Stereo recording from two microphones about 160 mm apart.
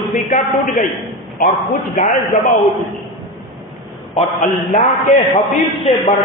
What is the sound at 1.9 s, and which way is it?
Speech, 55° left (ahead or behind).